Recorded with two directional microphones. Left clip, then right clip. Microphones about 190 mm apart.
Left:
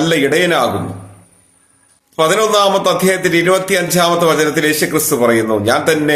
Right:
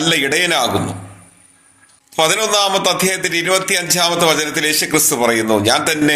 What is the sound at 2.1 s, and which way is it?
A man's voice, 15° left (ahead or behind).